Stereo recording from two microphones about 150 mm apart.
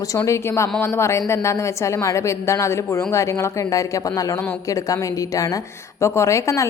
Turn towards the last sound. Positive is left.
turn(degrees=20)  # may be behind; listen again after turning